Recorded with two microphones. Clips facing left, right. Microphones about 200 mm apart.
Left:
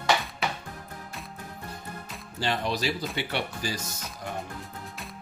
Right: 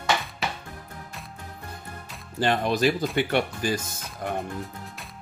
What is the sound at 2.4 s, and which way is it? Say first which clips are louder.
Speech: right 6 dB; 50° right (ahead or behind).